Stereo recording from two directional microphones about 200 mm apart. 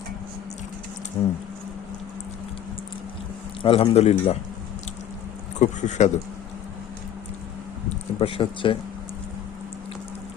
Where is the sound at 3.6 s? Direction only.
30° left (ahead or behind).